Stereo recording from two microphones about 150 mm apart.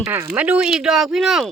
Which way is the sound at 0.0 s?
20° right (ahead or behind).